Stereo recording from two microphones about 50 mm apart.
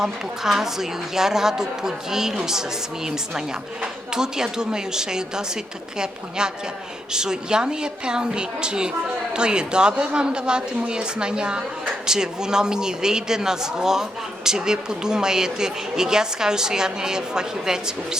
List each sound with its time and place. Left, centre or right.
0.0 s speech: centre